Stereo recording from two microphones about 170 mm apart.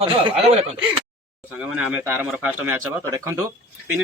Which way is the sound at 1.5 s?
10° right (ahead or behind).